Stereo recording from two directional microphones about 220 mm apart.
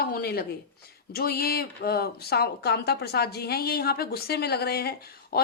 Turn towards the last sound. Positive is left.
turn(degrees=45)  # may be behind; listen again after turning